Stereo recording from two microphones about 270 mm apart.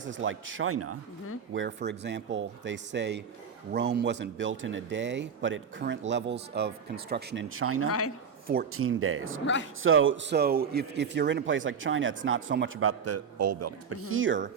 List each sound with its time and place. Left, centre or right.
0.0 s a man's voice: right
1.5 s speech: right
7.9 s speech: left
8.7 s a man's voice: right